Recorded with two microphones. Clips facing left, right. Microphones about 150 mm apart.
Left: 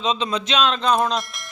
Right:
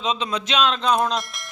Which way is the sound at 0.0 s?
5° right (ahead or behind).